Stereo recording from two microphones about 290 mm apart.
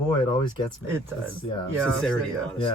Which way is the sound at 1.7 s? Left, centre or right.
Centre.